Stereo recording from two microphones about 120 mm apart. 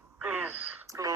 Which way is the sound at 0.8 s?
25° right (ahead or behind).